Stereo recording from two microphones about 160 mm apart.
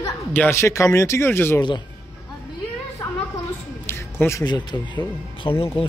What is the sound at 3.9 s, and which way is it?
Speech, 15° left (ahead or behind).